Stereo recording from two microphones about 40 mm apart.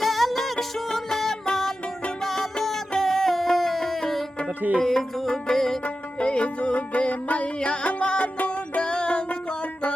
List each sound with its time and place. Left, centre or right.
0.0 s music: centre
4.4 s music: right
4.8 s music: centre
5.8 s music: left